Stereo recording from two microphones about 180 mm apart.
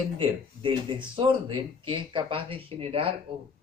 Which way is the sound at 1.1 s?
30° right (ahead or behind).